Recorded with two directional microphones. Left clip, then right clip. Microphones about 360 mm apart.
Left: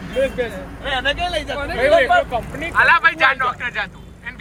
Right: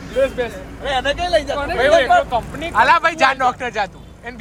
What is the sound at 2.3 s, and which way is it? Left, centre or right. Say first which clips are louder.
Speech: right 2 dB; centre.